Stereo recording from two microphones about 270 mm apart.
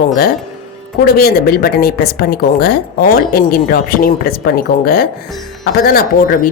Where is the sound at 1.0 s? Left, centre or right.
Left.